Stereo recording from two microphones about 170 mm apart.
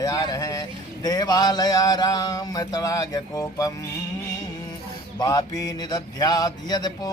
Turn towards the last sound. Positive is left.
turn(degrees=25)  # may be behind; listen again after turning